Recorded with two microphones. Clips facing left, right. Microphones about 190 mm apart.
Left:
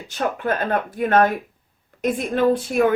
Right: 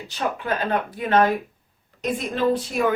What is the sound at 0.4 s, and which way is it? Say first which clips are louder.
Speech: left 2 dB; 50° left (ahead or behind).